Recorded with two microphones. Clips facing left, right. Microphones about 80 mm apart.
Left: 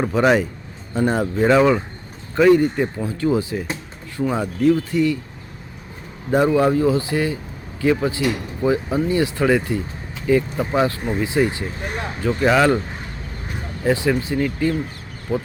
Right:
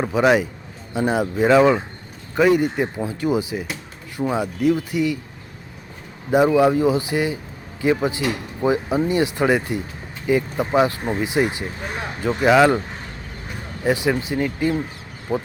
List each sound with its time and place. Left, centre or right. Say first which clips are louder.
0.0 s speech: even; centre
6.3 s speech: right 1 dB; centre
13.8 s speech: left 1 dB; centre